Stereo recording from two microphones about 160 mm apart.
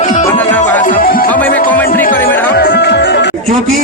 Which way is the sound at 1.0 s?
65° left (ahead or behind).